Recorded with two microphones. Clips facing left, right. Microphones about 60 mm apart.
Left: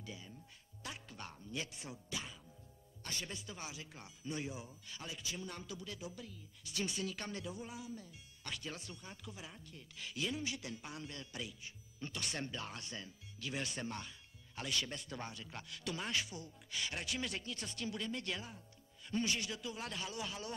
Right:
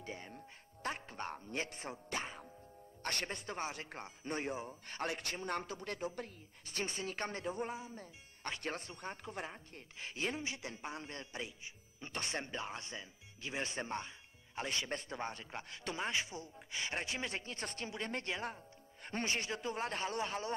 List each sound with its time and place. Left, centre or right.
0.0 s a man's voice: right
3.0 s speech: right
3.3 s a man's voice: right
18.0 s a man's voice: right